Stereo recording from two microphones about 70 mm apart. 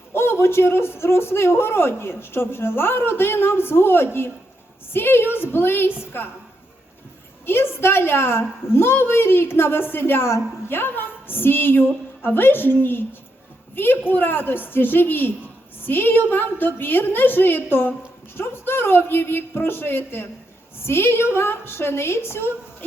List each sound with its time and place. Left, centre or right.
0.1 s a man's voice: left
7.4 s a man's voice: left